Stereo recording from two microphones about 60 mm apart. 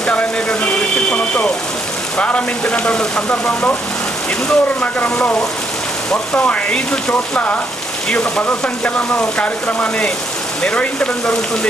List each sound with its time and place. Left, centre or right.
0.1 s a sound: left
2.1 s speech: left
6.4 s speech: left